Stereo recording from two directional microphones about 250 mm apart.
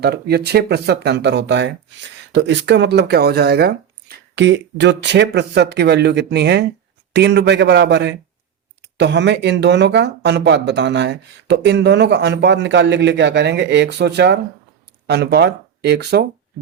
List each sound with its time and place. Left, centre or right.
0.0 s speech: right